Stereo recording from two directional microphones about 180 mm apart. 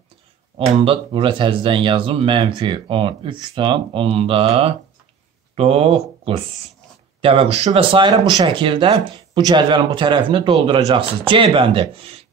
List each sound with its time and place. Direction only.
0.6 s speech: 30° right (ahead or behind)